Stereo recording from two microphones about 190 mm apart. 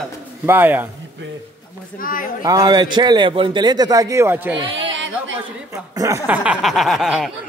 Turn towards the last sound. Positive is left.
turn(degrees=0)  # may be behind; listen again after turning